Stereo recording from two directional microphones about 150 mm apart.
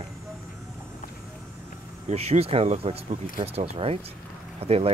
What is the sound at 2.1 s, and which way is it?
Speech, 45° right (ahead or behind).